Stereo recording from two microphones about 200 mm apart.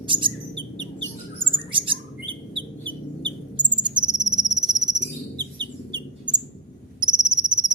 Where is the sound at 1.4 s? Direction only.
25° right (ahead or behind).